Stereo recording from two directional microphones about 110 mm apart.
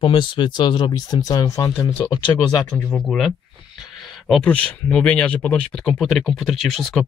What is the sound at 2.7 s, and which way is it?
Speech, 15° left (ahead or behind).